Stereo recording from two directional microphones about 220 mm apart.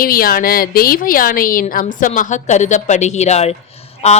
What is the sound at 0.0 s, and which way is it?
A woman's voice, 40° left (ahead or behind).